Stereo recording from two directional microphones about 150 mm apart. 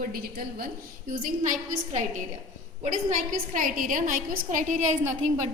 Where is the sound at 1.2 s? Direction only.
55° right (ahead or behind).